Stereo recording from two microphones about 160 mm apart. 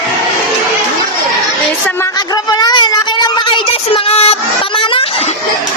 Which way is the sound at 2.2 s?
25° left (ahead or behind).